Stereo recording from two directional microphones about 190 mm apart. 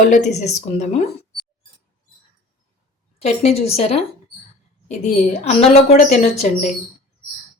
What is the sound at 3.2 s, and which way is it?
A woman's voice, 35° left (ahead or behind).